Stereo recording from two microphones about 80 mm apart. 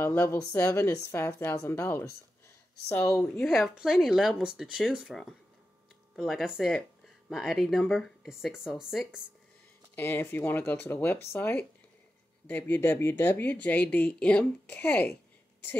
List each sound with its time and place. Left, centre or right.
0.2 s speech: left
3.4 s speech: centre
6.2 s speech: centre
9.9 s a woman's voice: left